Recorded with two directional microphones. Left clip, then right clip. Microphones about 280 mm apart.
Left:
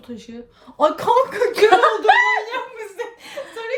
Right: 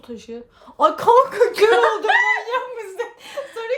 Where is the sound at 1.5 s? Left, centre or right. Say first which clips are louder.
Left 4 dB; centre.